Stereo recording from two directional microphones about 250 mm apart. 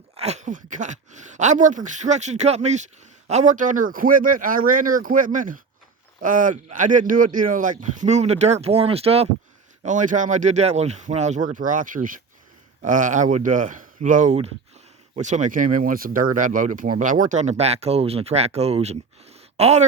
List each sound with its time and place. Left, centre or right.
0.2 s speech: right